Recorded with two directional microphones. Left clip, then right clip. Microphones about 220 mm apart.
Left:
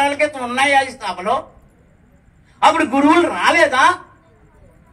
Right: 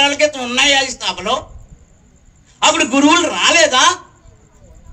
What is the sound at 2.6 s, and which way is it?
A man's voice, 30° right (ahead or behind).